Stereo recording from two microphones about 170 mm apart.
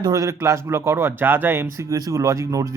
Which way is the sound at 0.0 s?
20° right (ahead or behind).